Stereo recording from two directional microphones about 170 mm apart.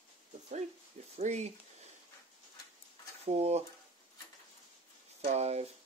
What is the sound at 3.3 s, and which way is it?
Speech, 40° right (ahead or behind).